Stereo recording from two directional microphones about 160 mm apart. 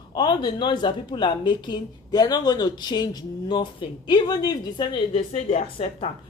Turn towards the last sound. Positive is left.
turn(degrees=40)  # may be behind; listen again after turning